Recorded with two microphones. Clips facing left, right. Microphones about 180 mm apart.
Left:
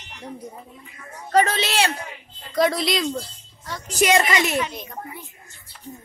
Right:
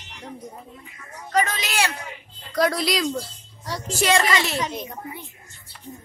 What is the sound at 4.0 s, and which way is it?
Speech, 20° left (ahead or behind).